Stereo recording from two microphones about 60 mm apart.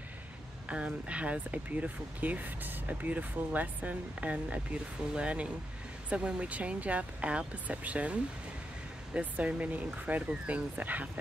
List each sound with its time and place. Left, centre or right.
0.7 s speech: right